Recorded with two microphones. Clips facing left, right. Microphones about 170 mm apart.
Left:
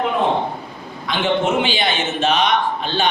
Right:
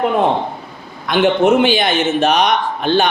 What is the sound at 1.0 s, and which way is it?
A man's voice, 60° right (ahead or behind).